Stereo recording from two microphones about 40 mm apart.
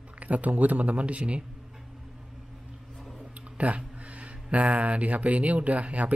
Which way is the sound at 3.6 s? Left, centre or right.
Right.